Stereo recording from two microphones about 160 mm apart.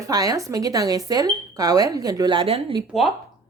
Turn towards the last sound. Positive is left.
turn(degrees=0)  # may be behind; listen again after turning